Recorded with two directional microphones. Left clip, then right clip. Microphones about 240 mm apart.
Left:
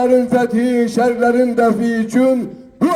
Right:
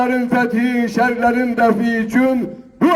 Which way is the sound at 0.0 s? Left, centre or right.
Left.